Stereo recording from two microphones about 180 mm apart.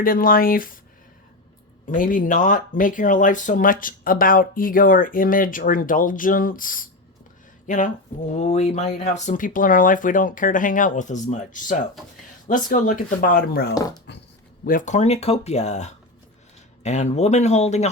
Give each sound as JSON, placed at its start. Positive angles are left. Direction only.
{"t": 0.0, "sound": "speech", "side_deg": 50}
{"t": 1.9, "sound": "speech", "side_deg": 50}
{"t": 14.1, "sound": "speech", "side_deg": 70}
{"t": 14.6, "sound": "speech", "side_deg": 50}